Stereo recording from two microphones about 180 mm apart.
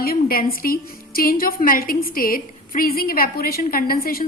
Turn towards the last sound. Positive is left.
turn(degrees=55)  # may be behind; listen again after turning